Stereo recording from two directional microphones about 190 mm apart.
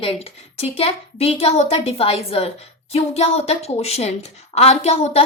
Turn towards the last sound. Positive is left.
turn(degrees=35)  # may be behind; listen again after turning